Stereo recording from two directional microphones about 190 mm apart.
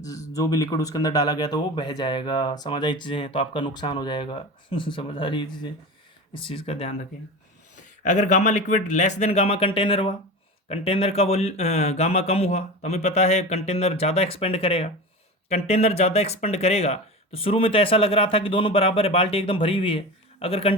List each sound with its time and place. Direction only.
0.0 s speech: 20° left (ahead or behind)